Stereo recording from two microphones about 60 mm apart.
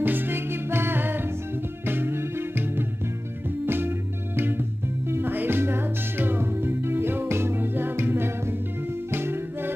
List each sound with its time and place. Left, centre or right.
0.0 s music: right